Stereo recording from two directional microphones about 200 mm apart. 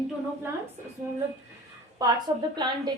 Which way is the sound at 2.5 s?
20° right (ahead or behind).